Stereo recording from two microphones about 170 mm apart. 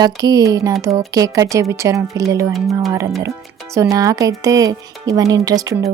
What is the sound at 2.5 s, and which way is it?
Speech, centre (ahead or behind).